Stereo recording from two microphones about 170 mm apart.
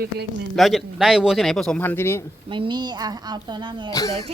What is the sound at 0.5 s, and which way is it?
Speech, centre (ahead or behind).